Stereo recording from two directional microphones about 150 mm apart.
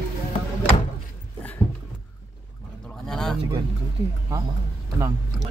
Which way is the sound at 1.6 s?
10° right (ahead or behind).